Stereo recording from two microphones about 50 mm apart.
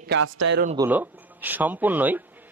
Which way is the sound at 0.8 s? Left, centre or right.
Right.